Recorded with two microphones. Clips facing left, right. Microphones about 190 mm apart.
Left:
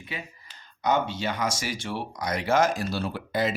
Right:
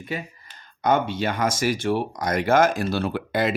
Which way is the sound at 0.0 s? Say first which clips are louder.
Right 7 dB; 50° right (ahead or behind).